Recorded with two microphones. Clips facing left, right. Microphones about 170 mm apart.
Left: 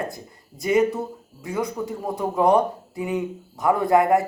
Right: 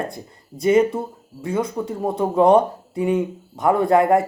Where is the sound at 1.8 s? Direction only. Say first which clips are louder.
Right 4 dB; 25° right (ahead or behind).